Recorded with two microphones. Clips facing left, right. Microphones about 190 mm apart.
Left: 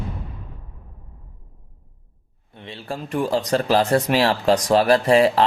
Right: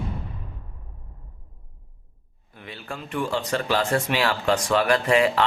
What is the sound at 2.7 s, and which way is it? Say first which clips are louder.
Speech: left 5 dB; 30° left (ahead or behind).